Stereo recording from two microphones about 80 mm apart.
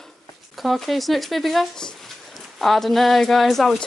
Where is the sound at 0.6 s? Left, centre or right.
Centre.